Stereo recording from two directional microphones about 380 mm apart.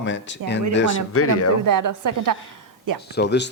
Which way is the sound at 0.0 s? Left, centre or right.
Left.